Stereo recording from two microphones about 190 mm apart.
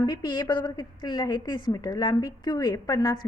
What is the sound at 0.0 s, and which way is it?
A woman's voice, 20° left (ahead or behind).